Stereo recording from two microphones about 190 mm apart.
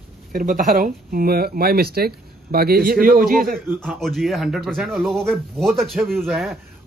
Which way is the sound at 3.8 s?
Centre (ahead or behind).